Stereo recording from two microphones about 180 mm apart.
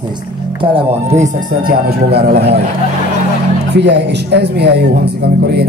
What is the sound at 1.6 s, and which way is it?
Music, 60° right (ahead or behind).